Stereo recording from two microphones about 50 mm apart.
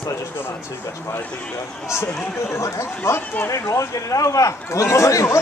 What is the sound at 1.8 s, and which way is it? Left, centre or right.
Speech, left.